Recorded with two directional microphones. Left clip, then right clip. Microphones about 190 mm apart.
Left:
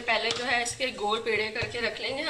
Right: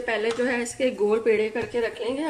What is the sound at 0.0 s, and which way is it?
A woman's voice, 45° right (ahead or behind).